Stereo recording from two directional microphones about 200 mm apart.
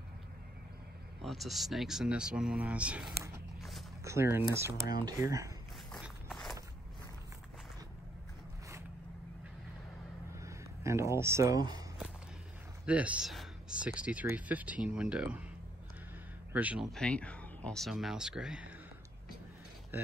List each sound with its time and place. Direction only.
1.2 s speech: centre (ahead or behind); by 5.5 s 15° right (ahead or behind)
5.9 s walk: 5° right (ahead or behind)
10.4 s speech: 15° right (ahead or behind)
12.8 s speech: 5° right (ahead or behind)
16.5 s speech: 5° right (ahead or behind)
16.9 s speech: 5° left (ahead or behind)